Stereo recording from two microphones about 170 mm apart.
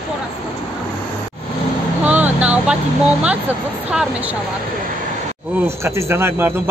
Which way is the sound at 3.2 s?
10° right (ahead or behind).